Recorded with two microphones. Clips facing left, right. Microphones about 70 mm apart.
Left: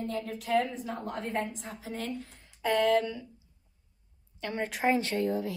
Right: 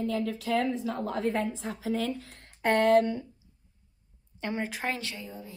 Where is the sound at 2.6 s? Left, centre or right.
Right.